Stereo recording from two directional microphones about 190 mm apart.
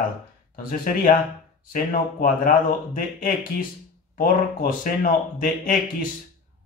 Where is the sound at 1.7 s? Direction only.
45° left (ahead or behind).